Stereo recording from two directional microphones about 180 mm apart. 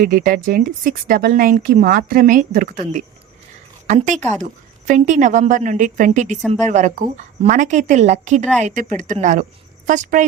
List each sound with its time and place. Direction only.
0.0 s a woman's voice: 50° right (ahead or behind)